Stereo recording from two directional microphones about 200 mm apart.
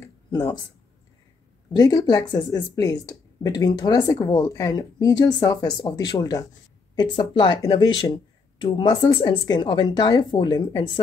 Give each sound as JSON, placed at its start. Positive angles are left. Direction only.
{"t": 0.3, "sound": "speech", "side_deg": 15}
{"t": 1.7, "sound": "speech", "side_deg": 20}